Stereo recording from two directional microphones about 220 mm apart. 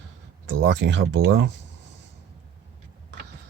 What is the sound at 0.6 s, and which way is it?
Speech, 55° right (ahead or behind).